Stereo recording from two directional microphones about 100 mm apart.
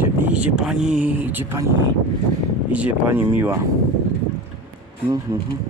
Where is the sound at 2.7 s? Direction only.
15° right (ahead or behind).